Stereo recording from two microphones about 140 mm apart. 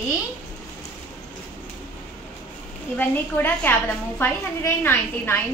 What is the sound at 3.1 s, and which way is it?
A woman's voice, 15° left (ahead or behind).